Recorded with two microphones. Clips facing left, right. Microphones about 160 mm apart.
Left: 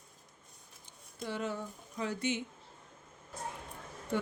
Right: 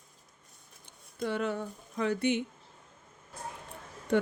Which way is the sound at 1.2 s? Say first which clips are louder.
Right 5 dB; 65° right (ahead or behind).